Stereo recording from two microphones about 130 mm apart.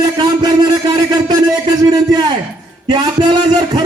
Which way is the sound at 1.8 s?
35° right (ahead or behind).